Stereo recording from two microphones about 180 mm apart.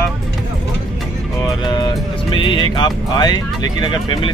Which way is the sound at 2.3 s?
25° left (ahead or behind).